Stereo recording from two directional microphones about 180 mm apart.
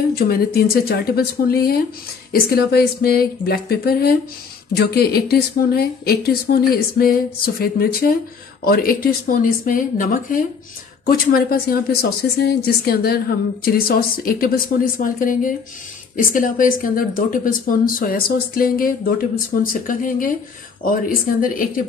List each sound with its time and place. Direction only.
0.1 s speech: 55° left (ahead or behind)